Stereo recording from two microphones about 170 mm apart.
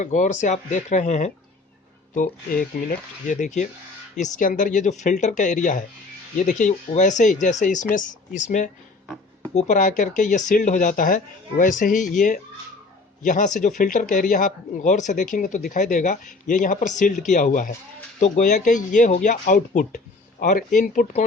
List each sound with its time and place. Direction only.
0.0 s speech: 45° left (ahead or behind)